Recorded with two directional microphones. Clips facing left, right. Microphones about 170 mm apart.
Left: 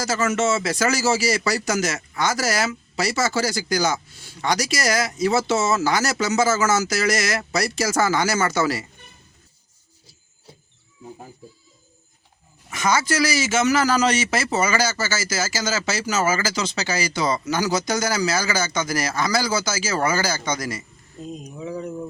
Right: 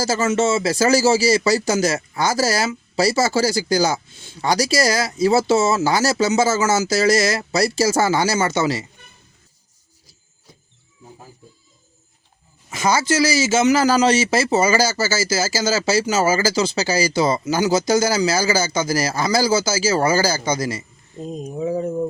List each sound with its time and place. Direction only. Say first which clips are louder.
0.0 s speech: right 3 dB; 30° right (ahead or behind)
12.7 s a man's voice: right 3 dB; 30° right (ahead or behind)
21.2 s a sound: right 7 dB; 45° right (ahead or behind)